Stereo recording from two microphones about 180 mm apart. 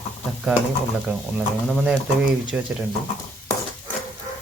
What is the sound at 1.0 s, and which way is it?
Speech, centre (ahead or behind).